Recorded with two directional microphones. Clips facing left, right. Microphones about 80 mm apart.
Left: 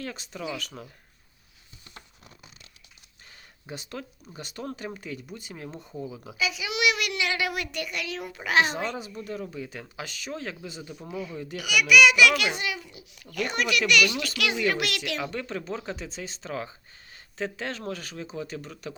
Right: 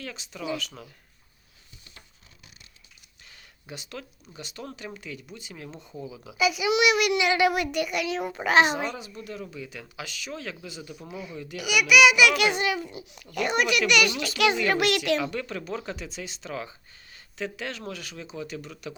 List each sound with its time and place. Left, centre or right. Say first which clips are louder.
0.0 s speech: left 2 dB; left
3.7 s speech: left 2 dB; left
4.4 s speech: left 3 dB; left
5.9 s speech: left 2 dB; left
6.3 s a child's voice: right 7 dB; centre
7.7 s child singing: right 6 dB; centre
8.4 s a child's voice: right 3 dB; right
9.2 s speech: left 2 dB; left
11.1 s child singing: left 3 dB; centre
12.2 s a child's voice: right 1 dB; right
12.6 s a child's voice: right 5 dB; right
13.2 s a child's voice: right 3 dB; centre
14.3 s a child's voice: right 5 dB; right
15.2 s speech: right 1 dB; left